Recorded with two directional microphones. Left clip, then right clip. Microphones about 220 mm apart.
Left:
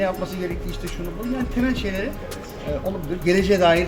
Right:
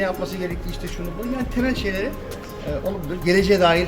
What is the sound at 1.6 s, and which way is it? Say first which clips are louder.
Speech: right 2 dB; 15° right (ahead or behind).